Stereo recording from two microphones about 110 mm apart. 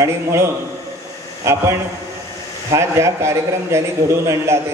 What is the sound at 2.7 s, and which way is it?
A man's voice, 25° right (ahead or behind).